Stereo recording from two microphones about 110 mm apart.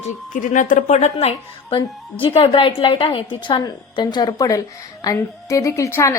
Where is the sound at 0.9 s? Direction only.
90° left.